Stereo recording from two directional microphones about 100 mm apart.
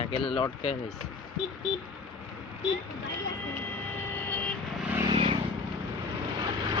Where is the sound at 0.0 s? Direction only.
55° left (ahead or behind).